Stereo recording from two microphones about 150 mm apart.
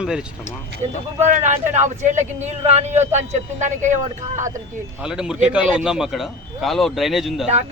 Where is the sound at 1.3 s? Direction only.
55° right (ahead or behind).